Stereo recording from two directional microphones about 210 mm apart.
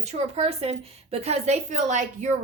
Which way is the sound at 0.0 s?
30° right (ahead or behind).